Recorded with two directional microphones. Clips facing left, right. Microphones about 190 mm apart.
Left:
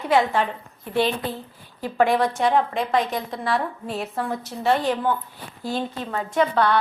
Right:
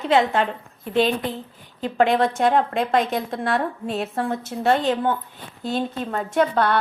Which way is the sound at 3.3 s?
50° right (ahead or behind).